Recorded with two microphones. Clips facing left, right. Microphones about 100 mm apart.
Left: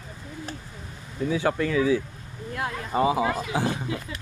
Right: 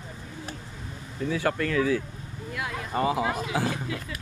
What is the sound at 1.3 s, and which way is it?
Speech, 10° left (ahead or behind).